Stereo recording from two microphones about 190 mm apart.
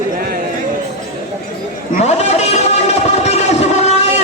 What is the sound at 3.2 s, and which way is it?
Vehicle, 35° left (ahead or behind).